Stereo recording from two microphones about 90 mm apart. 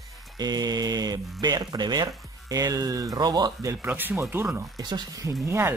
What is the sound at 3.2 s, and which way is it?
Mantra, 50° right (ahead or behind).